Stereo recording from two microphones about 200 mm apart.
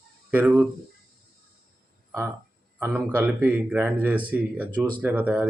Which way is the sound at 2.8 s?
5° right (ahead or behind).